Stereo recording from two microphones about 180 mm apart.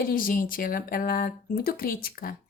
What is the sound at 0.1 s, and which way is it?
A woman's voice, 50° left (ahead or behind).